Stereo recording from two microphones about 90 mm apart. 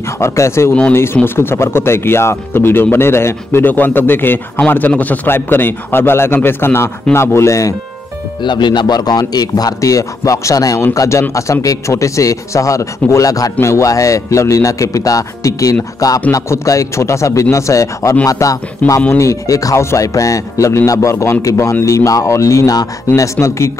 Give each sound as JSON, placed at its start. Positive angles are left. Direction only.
{"t": 0.2, "sound": "speech", "side_deg": 30}
{"t": 8.4, "sound": "speech", "side_deg": 60}